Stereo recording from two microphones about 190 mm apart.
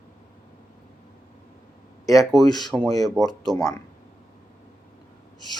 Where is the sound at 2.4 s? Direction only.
20° left (ahead or behind).